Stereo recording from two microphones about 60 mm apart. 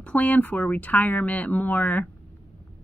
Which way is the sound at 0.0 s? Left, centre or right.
Left.